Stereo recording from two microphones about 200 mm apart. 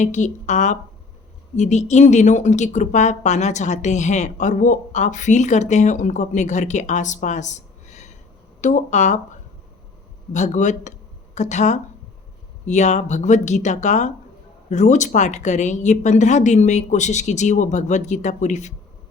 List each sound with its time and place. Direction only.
0.0 s a woman's voice: 35° left (ahead or behind)
10.3 s a woman's voice: 35° left (ahead or behind)